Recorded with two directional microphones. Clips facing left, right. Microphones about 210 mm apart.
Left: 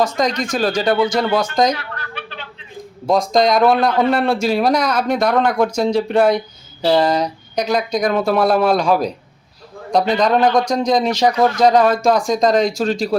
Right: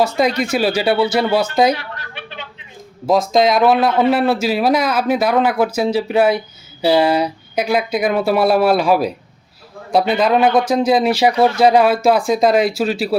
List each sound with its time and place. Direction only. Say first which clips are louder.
0.0 s speech: right 2 dB; 10° right (ahead or behind)
1.7 s a sound: right 1 dB; 20° right (ahead or behind)
3.1 s a man's voice: right 1 dB; 5° right (ahead or behind)